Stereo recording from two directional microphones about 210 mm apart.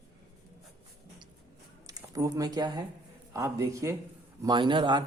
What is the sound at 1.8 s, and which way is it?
Speech, 15° right (ahead or behind).